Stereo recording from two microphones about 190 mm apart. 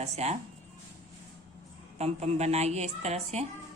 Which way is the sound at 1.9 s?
35° right (ahead or behind).